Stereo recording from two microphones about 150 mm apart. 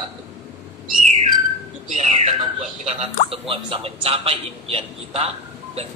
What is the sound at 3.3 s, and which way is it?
A man's voice, 40° right (ahead or behind).